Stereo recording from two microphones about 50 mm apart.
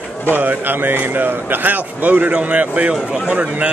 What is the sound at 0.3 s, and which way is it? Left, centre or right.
A man's voice, right.